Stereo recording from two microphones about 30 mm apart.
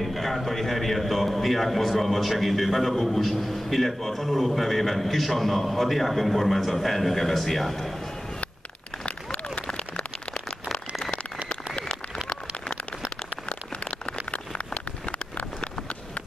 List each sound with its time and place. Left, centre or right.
0.0 s a man's voice: centre
9.0 s run: left
14.3 s a sound: left